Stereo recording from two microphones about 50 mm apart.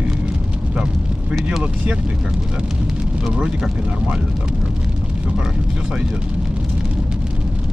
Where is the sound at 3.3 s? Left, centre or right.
Centre.